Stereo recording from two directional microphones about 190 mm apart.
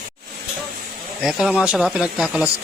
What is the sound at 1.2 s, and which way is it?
Speech, centre (ahead or behind).